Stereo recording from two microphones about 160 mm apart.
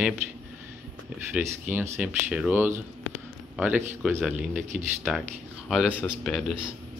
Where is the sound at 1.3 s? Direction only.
5° right (ahead or behind).